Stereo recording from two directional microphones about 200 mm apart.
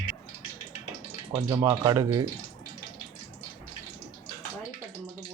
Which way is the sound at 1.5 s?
15° right (ahead or behind).